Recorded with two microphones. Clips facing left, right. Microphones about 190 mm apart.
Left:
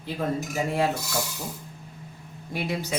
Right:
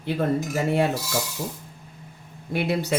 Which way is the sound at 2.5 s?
65° right (ahead or behind).